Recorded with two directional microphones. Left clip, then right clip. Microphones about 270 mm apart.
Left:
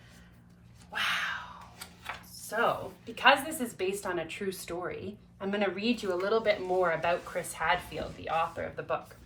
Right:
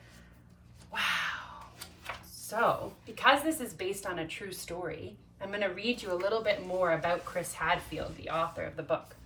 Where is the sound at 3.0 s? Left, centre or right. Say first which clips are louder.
Left 2 dB; centre.